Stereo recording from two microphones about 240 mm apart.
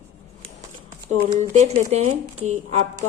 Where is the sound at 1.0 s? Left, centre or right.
Right.